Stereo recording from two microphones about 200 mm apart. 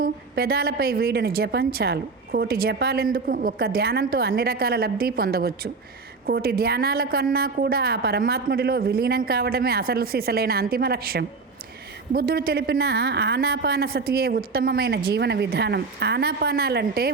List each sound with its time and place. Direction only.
0.0 s a woman's voice: 50° right (ahead or behind)